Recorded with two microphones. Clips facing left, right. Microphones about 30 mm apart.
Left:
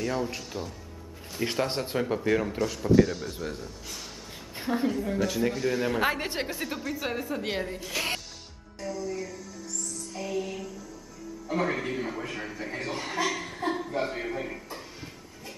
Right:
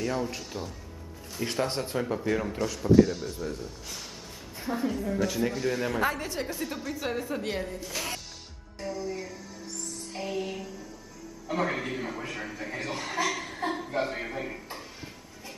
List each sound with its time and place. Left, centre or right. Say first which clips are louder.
0.0 s a man's voice: left 1 dB; centre
1.3 s speech: left 1 dB; centre
3.3 s speech: even; centre
4.7 s a woman's voice: left 3 dB; left
5.0 s a man's voice: left 1 dB; centre
5.9 s a woman's voice: left 1 dB; left
6.5 s a man's voice: left 1 dB; centre
7.4 s speech: left 1 dB; centre
8.7 s music: left 1 dB; centre
9.7 s music: left 1 dB; right
11.5 s a man's voice: left 1 dB; centre